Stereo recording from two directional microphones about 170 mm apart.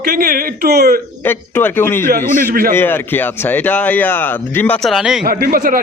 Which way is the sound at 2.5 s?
55° right (ahead or behind).